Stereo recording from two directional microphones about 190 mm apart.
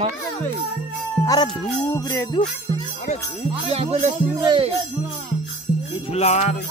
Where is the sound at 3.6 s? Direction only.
35° right (ahead or behind).